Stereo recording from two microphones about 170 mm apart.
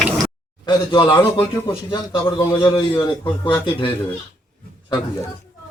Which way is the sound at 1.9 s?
30° left (ahead or behind).